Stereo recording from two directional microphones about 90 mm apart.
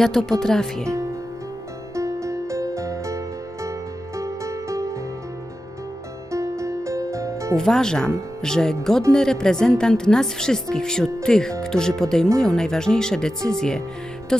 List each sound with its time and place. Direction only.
0.0 s speech: 5° left (ahead or behind)
2.0 s music: 35° right (ahead or behind)
4.2 s music: 35° right (ahead or behind)
6.3 s music: 35° right (ahead or behind)
7.5 s a woman's voice: 5° left (ahead or behind)